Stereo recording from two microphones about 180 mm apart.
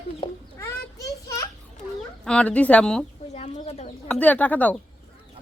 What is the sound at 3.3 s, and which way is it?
Speech, 35° left (ahead or behind).